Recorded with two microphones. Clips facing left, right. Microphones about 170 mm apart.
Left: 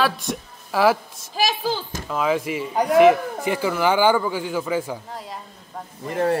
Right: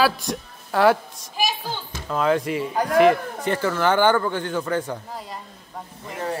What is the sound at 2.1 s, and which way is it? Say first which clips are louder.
Speech: right 1 dB; centre (ahead or behind).